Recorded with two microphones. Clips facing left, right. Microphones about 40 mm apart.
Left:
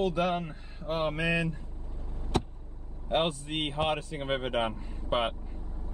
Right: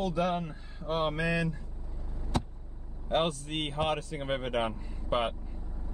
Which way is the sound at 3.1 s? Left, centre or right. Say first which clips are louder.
Left 1 dB; left.